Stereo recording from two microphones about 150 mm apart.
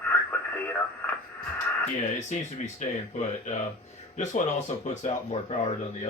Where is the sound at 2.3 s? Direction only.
50° left (ahead or behind).